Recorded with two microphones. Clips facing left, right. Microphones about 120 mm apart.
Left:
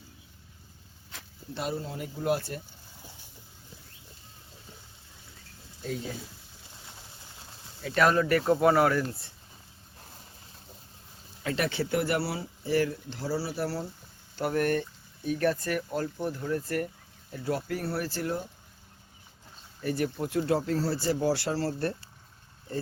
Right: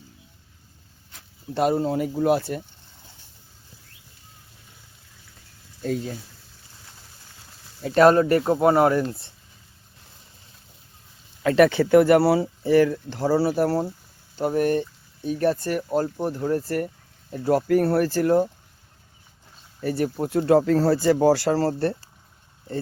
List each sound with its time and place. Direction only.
1.5 s speech: 60° right (ahead or behind); by 2.4 s 90° right
7.8 s speech: 35° right (ahead or behind)
11.4 s speech: 60° right (ahead or behind)
13.5 s speech: 50° right (ahead or behind)
14.3 s speech: 20° right (ahead or behind)
17.3 s speech: 45° right (ahead or behind)
19.8 s speech: 35° right (ahead or behind)
20.7 s speech: 75° right (ahead or behind)
21.3 s speech: 45° right (ahead or behind)